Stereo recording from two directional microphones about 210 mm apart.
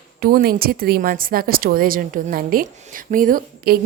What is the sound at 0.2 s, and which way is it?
A woman's voice, 45° right (ahead or behind).